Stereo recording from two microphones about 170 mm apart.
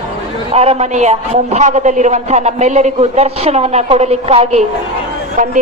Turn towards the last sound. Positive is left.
turn(degrees=-50)  # may be behind; listen again after turning